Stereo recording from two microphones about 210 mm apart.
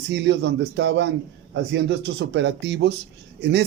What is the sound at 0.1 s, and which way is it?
A man's voice, 55° right (ahead or behind).